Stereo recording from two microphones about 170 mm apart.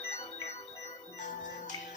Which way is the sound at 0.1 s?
35° left (ahead or behind).